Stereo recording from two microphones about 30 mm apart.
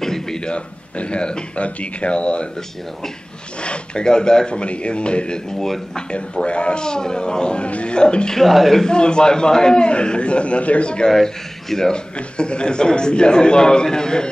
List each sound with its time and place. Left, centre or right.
0.0 s a sound: centre
0.5 s a man's voice: left
3.6 s a man's voice: left
4.6 s a man's voice: left
7.6 s a man's voice: left
8.5 s a man's voice: centre
8.8 s a man's voice: left
9.8 s a man's voice: left
11.2 s speech: centre
11.9 s a man's voice: left